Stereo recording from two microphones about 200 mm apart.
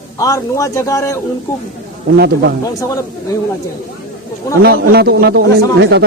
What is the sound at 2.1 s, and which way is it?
Speech, 50° right (ahead or behind).